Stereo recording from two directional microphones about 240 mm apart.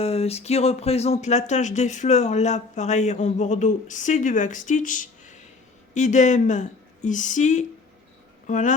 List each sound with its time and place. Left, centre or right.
0.0 s speech: left